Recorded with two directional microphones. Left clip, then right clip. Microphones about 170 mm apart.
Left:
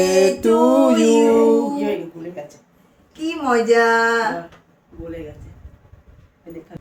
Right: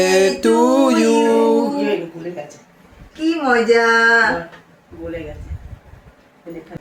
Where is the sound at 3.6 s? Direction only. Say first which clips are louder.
Right 2 dB; 50° left (ahead or behind).